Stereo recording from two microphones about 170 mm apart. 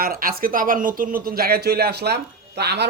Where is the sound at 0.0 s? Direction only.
60° right (ahead or behind).